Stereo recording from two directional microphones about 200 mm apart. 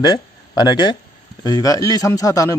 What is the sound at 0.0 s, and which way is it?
Speech, 20° left (ahead or behind).